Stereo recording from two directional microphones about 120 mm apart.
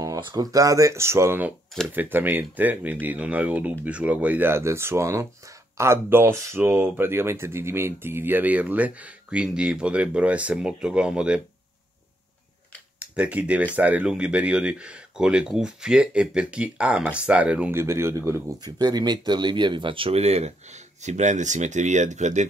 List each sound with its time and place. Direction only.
0.0 s speech: 30° right (ahead or behind); by 11.4 s 10° right (ahead or behind)
13.0 s speech: 10° right (ahead or behind)
18.6 s speech: 35° right (ahead or behind); by 22.5 s 75° right (ahead or behind)